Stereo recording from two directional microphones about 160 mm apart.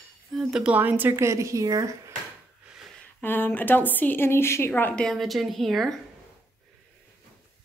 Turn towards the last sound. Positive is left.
turn(degrees=0)  # may be behind; listen again after turning